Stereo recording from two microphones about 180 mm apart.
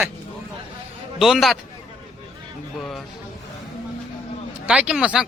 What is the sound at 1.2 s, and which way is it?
Speech, centre (ahead or behind).